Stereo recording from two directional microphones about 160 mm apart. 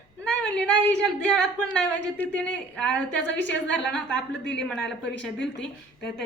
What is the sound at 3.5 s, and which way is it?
Speech, 90° left.